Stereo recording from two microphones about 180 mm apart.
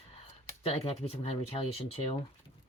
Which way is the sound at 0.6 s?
35° left (ahead or behind).